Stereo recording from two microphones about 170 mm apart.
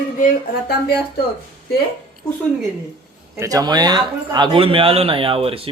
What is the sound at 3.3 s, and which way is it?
A man's voice, 20° right (ahead or behind).